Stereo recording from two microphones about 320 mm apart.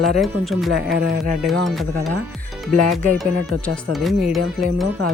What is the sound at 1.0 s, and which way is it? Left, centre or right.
Speech, right.